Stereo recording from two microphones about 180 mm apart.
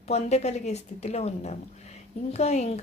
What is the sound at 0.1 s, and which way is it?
Speech, 35° left (ahead or behind).